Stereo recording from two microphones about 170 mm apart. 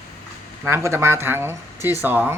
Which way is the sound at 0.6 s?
15° right (ahead or behind).